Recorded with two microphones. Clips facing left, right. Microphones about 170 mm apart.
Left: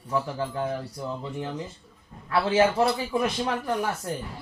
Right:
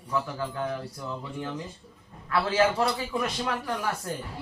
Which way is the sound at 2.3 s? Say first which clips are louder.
Left 2 dB; 25° left (ahead or behind).